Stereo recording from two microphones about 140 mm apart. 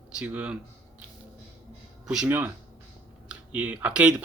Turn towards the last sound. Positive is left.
turn(degrees=-10)  # may be behind; listen again after turning